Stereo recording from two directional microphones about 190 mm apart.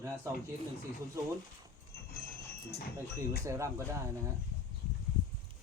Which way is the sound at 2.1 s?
55° left (ahead or behind).